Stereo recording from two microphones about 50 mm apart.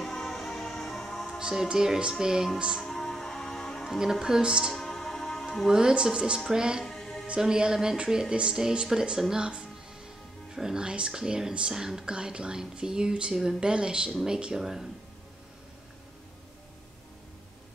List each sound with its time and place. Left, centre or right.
0.0 s music: centre
1.4 s speech: centre
2.8 s music: centre
4.0 s speech: centre
4.7 s music: centre
5.7 s speech: centre
6.8 s music: centre
7.2 s speech: centre